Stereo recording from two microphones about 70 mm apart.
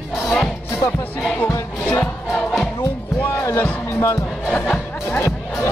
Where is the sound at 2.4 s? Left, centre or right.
Centre.